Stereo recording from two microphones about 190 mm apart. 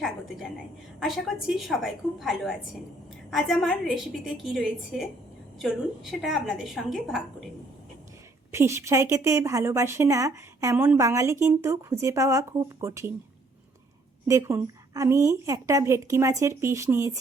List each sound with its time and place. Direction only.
0.0 s a woman's voice: centre (ahead or behind)
8.5 s a woman's voice: 15° right (ahead or behind)
14.3 s a woman's voice: 15° right (ahead or behind)